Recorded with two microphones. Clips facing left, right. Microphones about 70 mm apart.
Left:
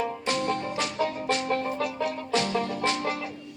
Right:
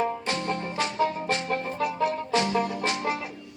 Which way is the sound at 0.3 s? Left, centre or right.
Right.